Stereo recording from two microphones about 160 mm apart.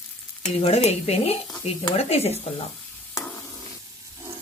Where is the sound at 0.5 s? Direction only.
40° left (ahead or behind).